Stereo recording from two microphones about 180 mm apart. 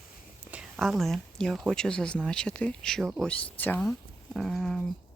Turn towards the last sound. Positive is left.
turn(degrees=0)  # may be behind; listen again after turning